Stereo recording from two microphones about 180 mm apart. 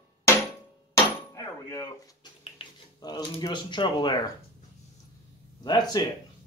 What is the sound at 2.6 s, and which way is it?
Speech, 25° left (ahead or behind).